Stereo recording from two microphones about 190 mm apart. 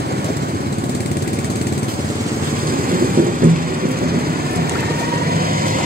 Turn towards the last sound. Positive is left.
turn(degrees=-50)  # may be behind; listen again after turning